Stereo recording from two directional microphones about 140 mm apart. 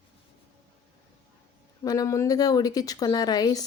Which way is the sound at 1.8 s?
25° left (ahead or behind).